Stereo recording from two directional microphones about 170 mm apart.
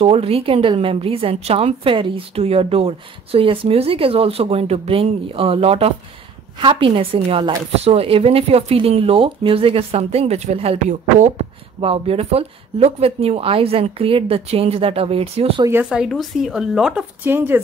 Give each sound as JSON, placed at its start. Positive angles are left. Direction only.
{"t": 0.0, "sound": "a woman's voice", "side_deg": -35}
{"t": 15.6, "sound": "speech", "side_deg": -10}